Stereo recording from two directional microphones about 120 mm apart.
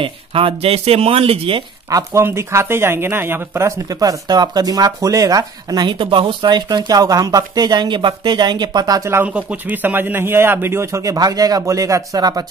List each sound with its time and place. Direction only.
0.0 s speech: 50° right (ahead or behind)
1.9 s a man's voice: 25° right (ahead or behind)